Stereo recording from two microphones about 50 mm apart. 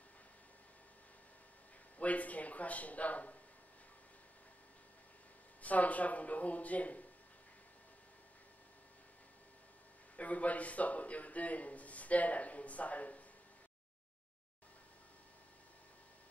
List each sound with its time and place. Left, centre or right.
2.0 s a sound: left
5.6 s speech: left
10.1 s a man's voice: left